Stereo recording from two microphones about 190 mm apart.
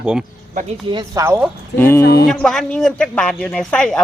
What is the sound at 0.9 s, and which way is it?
Speech, 15° right (ahead or behind).